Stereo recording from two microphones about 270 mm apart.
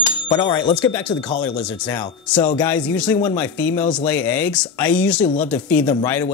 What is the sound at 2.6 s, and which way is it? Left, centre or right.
Speech, centre.